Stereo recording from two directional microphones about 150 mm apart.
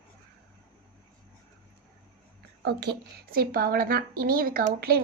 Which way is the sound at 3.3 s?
85° right.